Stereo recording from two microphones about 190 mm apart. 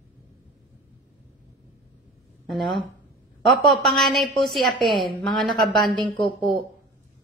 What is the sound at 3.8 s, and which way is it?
Speech, centre (ahead or behind).